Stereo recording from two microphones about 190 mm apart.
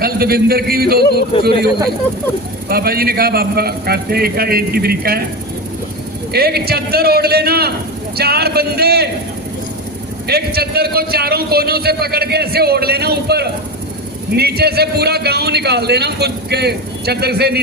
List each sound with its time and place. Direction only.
0.0 s a man's voice: 55° right (ahead or behind)
6.3 s a man's voice: 55° right (ahead or behind)
10.2 s a man's voice: 55° right (ahead or behind)